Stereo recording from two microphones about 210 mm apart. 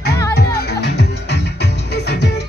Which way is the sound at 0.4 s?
50° left (ahead or behind).